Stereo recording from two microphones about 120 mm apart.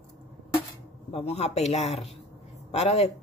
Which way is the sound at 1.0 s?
60° left (ahead or behind).